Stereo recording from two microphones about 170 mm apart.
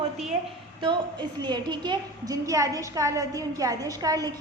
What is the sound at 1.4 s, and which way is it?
A woman's voice, 25° right (ahead or behind).